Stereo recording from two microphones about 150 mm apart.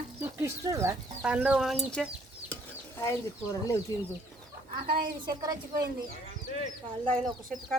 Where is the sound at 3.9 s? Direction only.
20° left (ahead or behind).